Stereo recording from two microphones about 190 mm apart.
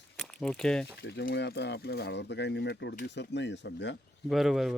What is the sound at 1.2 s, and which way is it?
Speech, 60° left (ahead or behind).